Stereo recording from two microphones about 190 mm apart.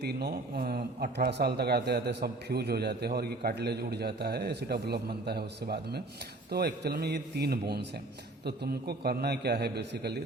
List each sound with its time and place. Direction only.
0.0 s speech: 60° right (ahead or behind)